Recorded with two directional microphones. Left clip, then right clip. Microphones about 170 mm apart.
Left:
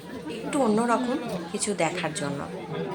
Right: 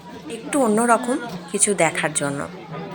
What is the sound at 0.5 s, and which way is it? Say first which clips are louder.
Speech: right 6 dB; 25° right (ahead or behind).